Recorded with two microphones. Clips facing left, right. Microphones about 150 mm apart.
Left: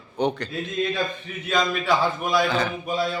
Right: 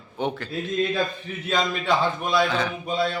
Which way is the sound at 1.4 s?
25° right (ahead or behind).